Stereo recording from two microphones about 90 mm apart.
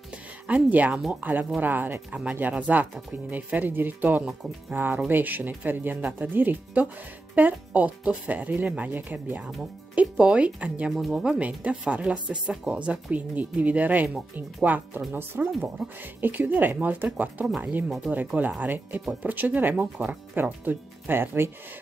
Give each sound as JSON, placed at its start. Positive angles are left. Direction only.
{"t": 0.5, "sound": "speech", "side_deg": -15}
{"t": 4.2, "sound": "speech", "side_deg": -10}
{"t": 4.7, "sound": "speech", "side_deg": -20}
{"t": 10.9, "sound": "speech", "side_deg": -5}